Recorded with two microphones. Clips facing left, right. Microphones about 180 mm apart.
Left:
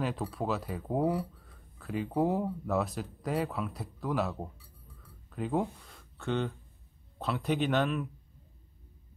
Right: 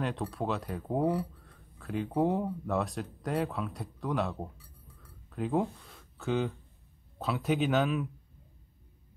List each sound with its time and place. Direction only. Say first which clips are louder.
0.0 s speech: even; centre (ahead or behind)
5.0 s a sound: right 1 dB; centre (ahead or behind)
7.2 s speech: right 1 dB; centre (ahead or behind)